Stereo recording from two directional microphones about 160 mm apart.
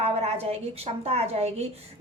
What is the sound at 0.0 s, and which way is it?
A woman's voice, 40° right (ahead or behind).